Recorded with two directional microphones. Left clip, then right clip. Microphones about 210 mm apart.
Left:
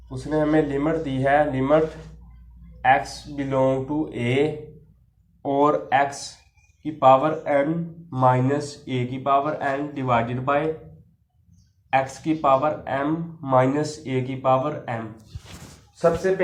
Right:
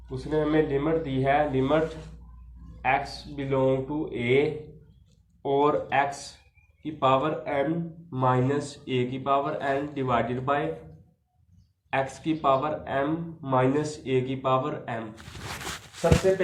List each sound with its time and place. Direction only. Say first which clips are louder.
0.3 s speech: left 3 dB; 50° left (ahead or behind)
3.3 s speech: left 3 dB; 50° left (ahead or behind)
5.4 s speech: left 3 dB; 40° left (ahead or behind)
11.9 s speech: left 5 dB; 45° left (ahead or behind)